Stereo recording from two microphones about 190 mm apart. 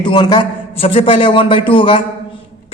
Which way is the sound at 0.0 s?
25° left (ahead or behind).